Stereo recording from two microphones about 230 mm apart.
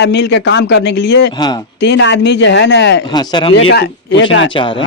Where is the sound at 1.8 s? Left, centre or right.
Left.